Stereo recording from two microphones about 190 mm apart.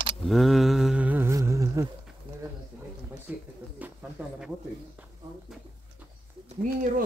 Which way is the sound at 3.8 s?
10° right (ahead or behind).